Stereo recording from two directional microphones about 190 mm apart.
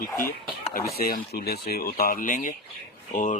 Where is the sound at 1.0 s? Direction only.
55° left (ahead or behind).